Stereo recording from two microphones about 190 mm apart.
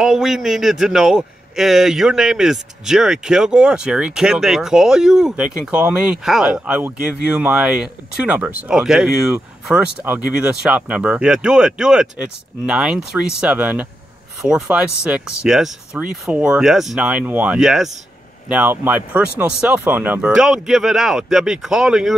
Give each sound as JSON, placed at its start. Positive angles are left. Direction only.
{"t": 0.0, "sound": "a man's voice", "side_deg": -5}